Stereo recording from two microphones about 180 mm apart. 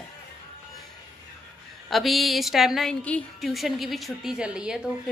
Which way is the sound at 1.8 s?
Centre (ahead or behind).